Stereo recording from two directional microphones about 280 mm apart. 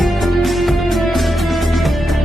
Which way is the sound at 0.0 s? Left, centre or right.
Centre.